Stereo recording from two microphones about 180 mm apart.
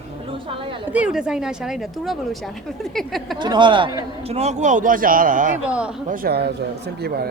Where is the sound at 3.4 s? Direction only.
25° right (ahead or behind); by 5.6 s 45° right (ahead or behind).